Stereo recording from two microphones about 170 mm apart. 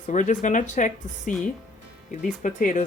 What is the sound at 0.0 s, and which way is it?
Speech, 50° left (ahead or behind).